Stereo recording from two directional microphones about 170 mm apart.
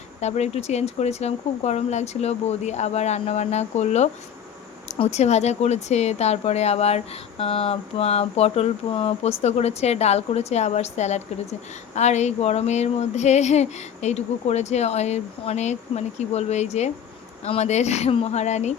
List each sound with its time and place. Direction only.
0.2 s speech: 40° left (ahead or behind)